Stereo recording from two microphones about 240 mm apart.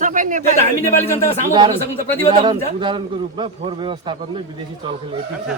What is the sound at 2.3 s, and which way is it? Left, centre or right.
A man's voice, centre.